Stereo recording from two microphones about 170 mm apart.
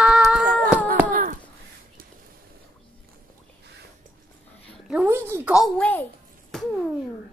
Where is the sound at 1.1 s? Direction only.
55° right (ahead or behind).